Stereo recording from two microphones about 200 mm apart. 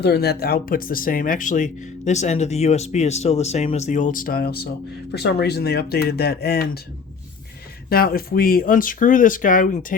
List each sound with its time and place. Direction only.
0.0 s speech: 55° left (ahead or behind)
7.9 s speech: 50° left (ahead or behind)